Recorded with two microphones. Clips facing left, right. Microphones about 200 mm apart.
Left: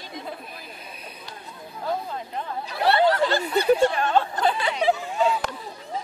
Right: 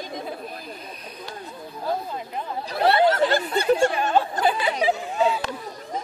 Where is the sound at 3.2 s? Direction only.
45° right (ahead or behind).